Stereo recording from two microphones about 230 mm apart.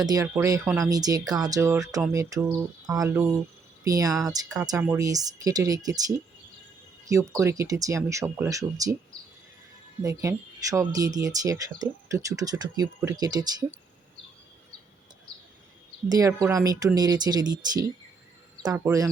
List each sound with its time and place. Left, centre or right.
0.0 s speech: centre
10.0 s speech: centre
16.0 s speech: centre